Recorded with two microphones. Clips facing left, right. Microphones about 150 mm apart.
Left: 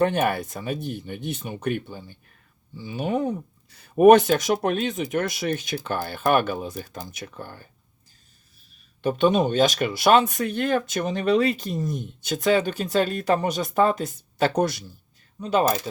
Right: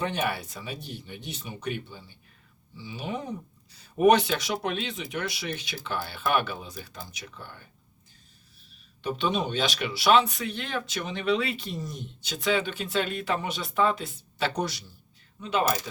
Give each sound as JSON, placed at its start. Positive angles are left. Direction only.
{"t": 0.0, "sound": "speech", "side_deg": 50}
{"t": 9.0, "sound": "speech", "side_deg": 50}
{"t": 15.4, "sound": "speech", "side_deg": 40}